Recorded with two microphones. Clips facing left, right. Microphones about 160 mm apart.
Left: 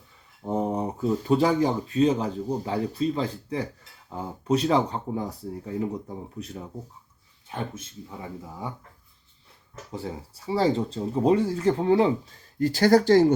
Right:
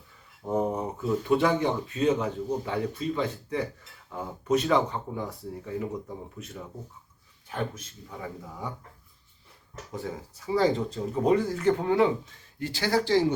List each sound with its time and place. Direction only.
0.4 s a sound: 30° left (ahead or behind)
1.4 s speech: 35° left (ahead or behind)
7.4 s speech: 25° left (ahead or behind)
9.9 s speech: 30° left (ahead or behind)